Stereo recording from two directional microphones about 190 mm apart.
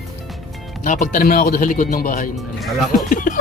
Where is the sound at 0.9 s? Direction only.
45° left (ahead or behind).